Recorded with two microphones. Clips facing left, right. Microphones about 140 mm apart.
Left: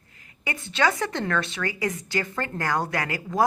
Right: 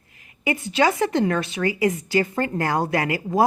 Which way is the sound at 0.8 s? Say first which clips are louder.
Right 5 dB; 25° right (ahead or behind).